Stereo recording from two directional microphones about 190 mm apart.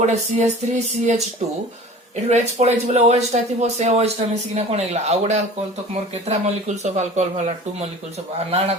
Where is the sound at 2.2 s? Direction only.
35° right (ahead or behind).